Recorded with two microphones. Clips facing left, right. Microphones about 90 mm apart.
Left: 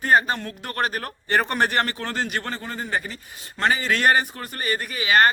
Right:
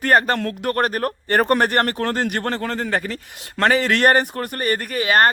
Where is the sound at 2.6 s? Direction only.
70° right (ahead or behind); by 5.3 s 45° right (ahead or behind).